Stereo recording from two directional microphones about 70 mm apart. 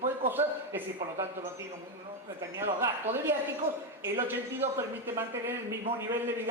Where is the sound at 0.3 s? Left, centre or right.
Right.